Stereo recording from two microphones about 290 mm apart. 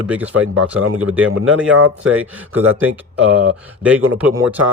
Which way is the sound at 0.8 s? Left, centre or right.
Right.